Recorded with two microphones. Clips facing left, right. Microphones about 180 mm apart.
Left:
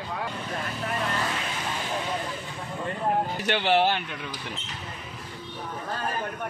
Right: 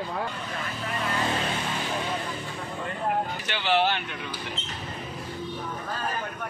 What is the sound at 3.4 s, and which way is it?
Speech, 50° left (ahead or behind).